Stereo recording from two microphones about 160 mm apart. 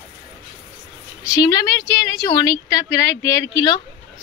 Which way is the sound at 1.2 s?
20° left (ahead or behind).